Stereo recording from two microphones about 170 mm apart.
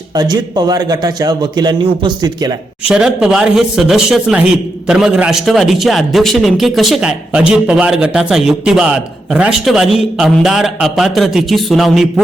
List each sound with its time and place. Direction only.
0.1 s a man's voice: 25° right (ahead or behind)
2.8 s speech: 5° right (ahead or behind)